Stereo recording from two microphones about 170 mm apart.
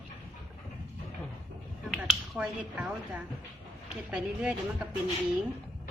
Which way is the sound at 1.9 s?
5° right (ahead or behind).